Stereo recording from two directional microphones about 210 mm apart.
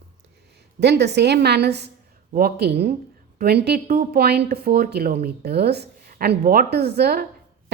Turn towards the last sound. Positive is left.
turn(degrees=-45)  # may be behind; listen again after turning